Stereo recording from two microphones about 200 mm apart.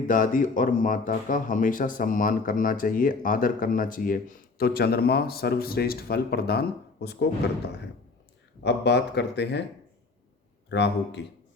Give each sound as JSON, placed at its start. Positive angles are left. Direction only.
{"t": 0.1, "sound": "speech", "side_deg": 40}
{"t": 8.6, "sound": "speech", "side_deg": 60}
{"t": 10.7, "sound": "speech", "side_deg": 60}